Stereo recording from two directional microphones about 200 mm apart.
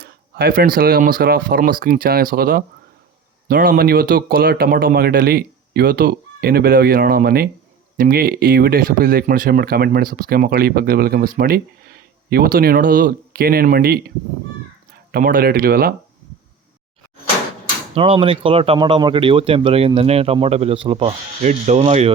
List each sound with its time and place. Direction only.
0.0 s speech: 50° right (ahead or behind)
15.1 s speech: 45° right (ahead or behind)
17.9 s speech: 25° right (ahead or behind)